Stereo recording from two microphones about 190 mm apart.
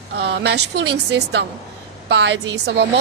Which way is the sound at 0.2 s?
65° right (ahead or behind).